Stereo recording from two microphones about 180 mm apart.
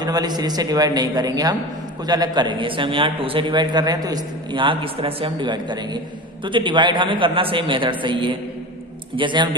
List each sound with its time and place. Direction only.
0.0 s a man's voice: 20° right (ahead or behind)